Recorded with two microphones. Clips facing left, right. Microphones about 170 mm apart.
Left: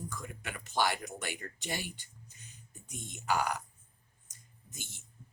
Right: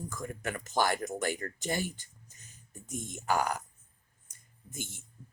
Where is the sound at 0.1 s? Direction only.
45° right (ahead or behind).